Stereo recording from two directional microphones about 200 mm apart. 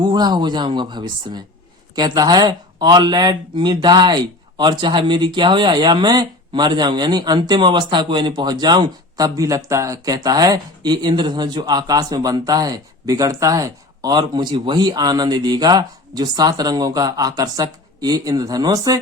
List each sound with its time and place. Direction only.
0.0 s speech: 20° right (ahead or behind)